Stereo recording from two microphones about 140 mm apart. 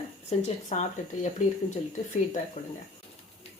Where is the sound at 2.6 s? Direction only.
35° left (ahead or behind).